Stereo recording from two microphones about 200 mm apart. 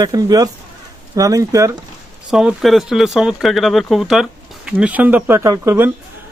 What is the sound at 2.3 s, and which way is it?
Speech, centre (ahead or behind).